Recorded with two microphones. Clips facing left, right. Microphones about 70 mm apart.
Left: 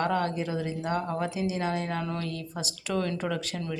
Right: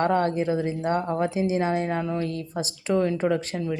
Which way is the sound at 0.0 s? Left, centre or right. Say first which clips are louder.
Right 5 dB; right.